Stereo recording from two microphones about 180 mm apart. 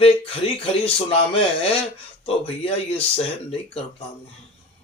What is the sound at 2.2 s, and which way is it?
Speech, 30° left (ahead or behind).